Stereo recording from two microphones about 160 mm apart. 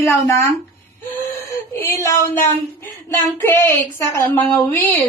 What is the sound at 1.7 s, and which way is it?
Speech, 15° left (ahead or behind).